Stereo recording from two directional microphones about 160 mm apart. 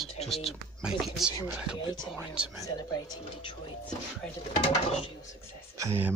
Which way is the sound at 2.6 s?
25° left (ahead or behind).